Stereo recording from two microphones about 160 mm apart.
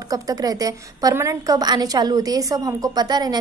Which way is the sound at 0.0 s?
20° right (ahead or behind).